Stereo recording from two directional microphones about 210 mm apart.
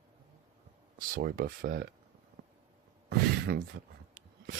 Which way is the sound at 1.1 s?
45° right (ahead or behind).